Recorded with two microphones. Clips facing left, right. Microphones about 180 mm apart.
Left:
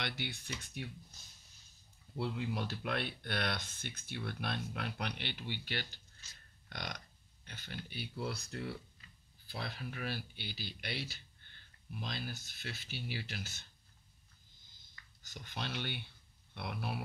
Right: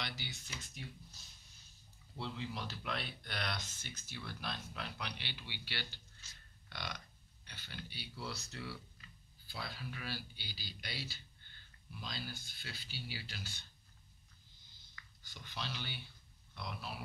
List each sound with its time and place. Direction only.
0.0 s speech: 55° left (ahead or behind)
2.1 s speech: 55° left (ahead or behind)
6.7 s burping: 45° left (ahead or behind)
7.4 s speech: 50° left (ahead or behind)
15.2 s speech: 50° left (ahead or behind)